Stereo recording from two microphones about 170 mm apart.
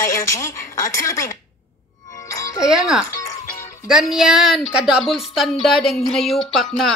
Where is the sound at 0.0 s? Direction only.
20° left (ahead or behind).